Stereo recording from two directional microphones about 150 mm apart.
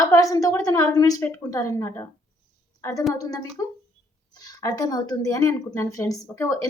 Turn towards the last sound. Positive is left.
turn(degrees=20)  # may be behind; listen again after turning